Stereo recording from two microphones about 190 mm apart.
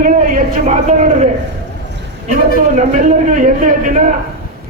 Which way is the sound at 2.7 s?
40° right (ahead or behind).